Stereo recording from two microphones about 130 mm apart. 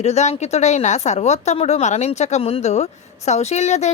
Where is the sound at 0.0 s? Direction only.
60° left (ahead or behind).